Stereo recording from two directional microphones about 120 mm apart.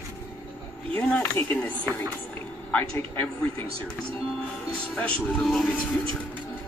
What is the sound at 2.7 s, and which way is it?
Speech, 15° left (ahead or behind).